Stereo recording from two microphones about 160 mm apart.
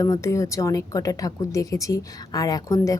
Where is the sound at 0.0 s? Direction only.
20° left (ahead or behind).